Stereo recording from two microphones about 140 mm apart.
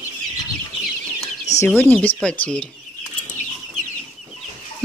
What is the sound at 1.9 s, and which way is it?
Speech, 5° left (ahead or behind).